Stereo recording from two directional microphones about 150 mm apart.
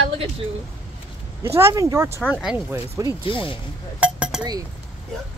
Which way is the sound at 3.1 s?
35° left (ahead or behind).